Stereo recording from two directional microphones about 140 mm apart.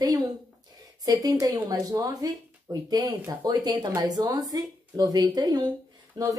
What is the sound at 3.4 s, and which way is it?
A woman's voice, 30° right (ahead or behind).